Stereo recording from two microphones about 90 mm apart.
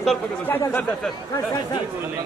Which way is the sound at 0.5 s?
25° left (ahead or behind).